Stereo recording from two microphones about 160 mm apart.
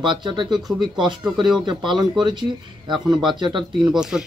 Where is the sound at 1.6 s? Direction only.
25° right (ahead or behind).